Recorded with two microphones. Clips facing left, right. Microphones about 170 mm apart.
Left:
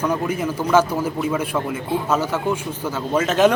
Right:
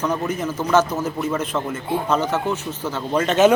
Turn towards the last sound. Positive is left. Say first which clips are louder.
# even
turn(degrees=0)  # may be behind; listen again after turning